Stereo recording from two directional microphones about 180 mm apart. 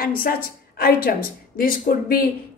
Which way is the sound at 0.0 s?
55° left (ahead or behind).